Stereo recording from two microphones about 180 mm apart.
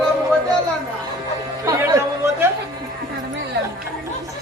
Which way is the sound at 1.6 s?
15° right (ahead or behind).